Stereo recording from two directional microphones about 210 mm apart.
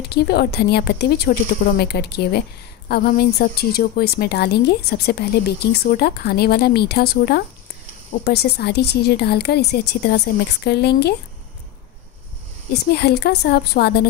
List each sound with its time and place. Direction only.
0.1 s a woman's voice: 50° left (ahead or behind)
12.9 s a woman's voice: 50° left (ahead or behind)